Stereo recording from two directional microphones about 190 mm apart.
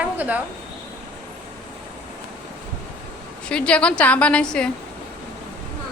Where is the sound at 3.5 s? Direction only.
5° left (ahead or behind).